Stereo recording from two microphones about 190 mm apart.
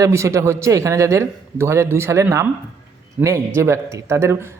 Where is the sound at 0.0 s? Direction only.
15° right (ahead or behind).